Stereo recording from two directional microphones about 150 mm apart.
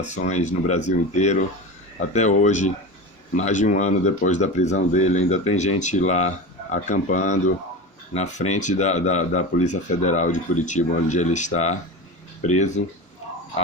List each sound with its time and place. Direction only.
0.0 s speech: 50° left (ahead or behind)